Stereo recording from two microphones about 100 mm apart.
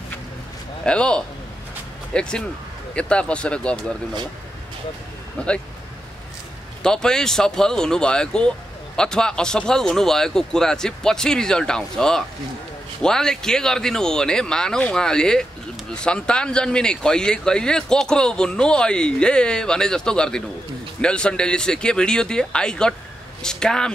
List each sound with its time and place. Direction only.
0.8 s speech: 10° left (ahead or behind)
6.8 s speech: 5° left (ahead or behind)